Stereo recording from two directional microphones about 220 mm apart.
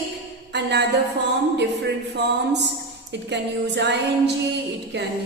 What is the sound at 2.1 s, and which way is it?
Speech, 50° right (ahead or behind).